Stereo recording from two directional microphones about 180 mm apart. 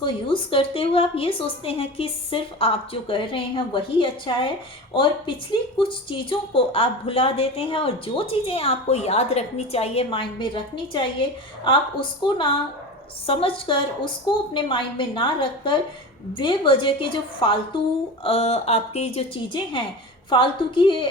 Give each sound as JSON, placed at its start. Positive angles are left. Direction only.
{"t": 0.0, "sound": "a woman's voice", "side_deg": 30}
{"t": 5.7, "sound": "a woman's voice", "side_deg": 30}